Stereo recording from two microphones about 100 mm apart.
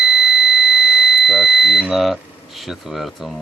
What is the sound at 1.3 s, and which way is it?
Speech, 5° right (ahead or behind).